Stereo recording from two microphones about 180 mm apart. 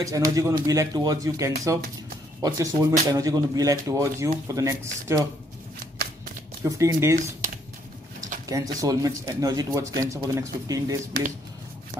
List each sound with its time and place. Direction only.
0.0 s speech: 20° right (ahead or behind)
6.6 s speech: 15° right (ahead or behind)
8.5 s speech: 20° right (ahead or behind)